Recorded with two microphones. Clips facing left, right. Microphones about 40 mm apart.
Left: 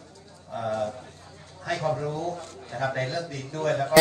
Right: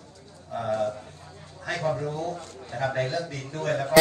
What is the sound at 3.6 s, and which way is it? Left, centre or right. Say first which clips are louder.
Speech: left 2 dB; left.